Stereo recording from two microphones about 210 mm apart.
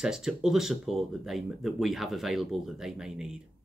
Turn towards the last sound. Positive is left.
turn(degrees=0)  # may be behind; listen again after turning